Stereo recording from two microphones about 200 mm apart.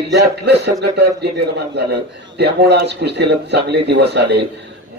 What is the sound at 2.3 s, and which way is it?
Speech, 55° right (ahead or behind).